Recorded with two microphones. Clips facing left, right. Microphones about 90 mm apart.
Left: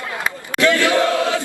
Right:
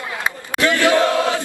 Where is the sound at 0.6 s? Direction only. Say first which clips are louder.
Even; 20° right (ahead or behind).